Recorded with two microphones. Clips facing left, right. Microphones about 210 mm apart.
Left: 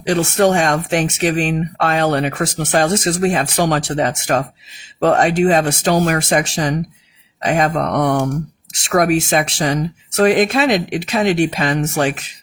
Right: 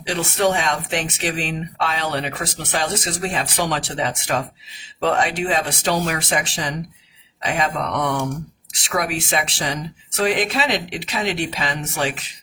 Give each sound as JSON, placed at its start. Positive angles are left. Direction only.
{"t": 0.0, "sound": "speech", "side_deg": 45}